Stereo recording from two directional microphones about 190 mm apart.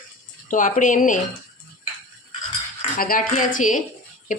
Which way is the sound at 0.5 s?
45° left (ahead or behind).